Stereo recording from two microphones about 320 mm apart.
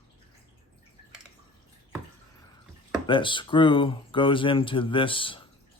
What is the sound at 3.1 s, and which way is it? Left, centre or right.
Speech, centre.